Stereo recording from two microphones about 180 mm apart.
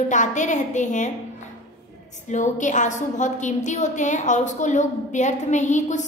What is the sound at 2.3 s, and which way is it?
A woman's voice, 45° left (ahead or behind).